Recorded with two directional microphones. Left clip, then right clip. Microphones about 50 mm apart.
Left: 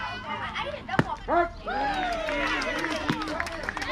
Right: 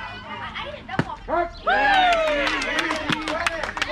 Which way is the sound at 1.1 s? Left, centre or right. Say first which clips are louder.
Right 1 dB; left.